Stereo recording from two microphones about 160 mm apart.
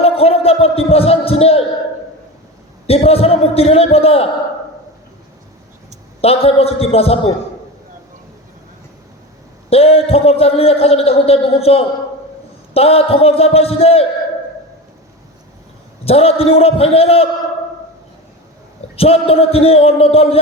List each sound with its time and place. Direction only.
0.0 s a sound: 40° left (ahead or behind)
2.8 s a man's voice: 40° left (ahead or behind)
6.2 s a man's voice: 40° left (ahead or behind)
9.6 s a man's voice: 40° left (ahead or behind)
16.0 s a man's voice: 40° left (ahead or behind)
18.9 s a man's voice: 40° left (ahead or behind)